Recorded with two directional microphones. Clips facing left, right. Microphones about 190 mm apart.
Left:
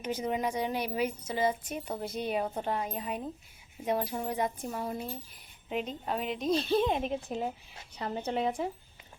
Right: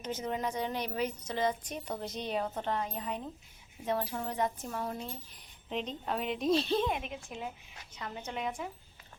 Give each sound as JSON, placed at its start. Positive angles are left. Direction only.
{"t": 0.0, "sound": "speech", "side_deg": 10}
{"t": 6.8, "sound": "a woman's voice", "side_deg": 30}